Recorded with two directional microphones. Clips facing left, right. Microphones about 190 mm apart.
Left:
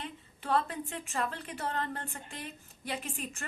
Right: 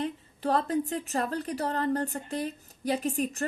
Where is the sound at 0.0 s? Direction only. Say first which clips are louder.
Right 11 dB; 40° right (ahead or behind).